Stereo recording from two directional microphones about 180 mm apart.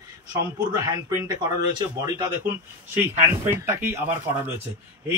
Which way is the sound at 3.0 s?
15° right (ahead or behind).